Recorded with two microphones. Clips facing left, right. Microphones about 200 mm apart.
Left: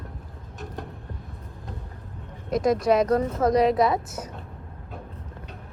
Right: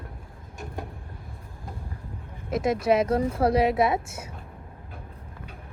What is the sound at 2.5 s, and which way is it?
A woman's voice, 5° right (ahead or behind).